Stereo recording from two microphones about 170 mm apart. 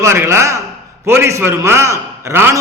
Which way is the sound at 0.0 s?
15° right (ahead or behind).